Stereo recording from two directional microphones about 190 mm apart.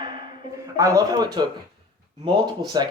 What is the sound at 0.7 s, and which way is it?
Speech, 15° right (ahead or behind).